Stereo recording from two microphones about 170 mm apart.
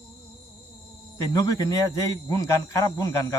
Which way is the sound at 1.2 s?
20° left (ahead or behind).